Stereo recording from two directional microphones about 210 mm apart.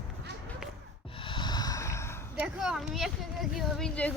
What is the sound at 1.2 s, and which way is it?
Snort, 25° left (ahead or behind).